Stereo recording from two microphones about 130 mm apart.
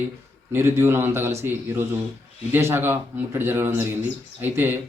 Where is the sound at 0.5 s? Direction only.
20° right (ahead or behind).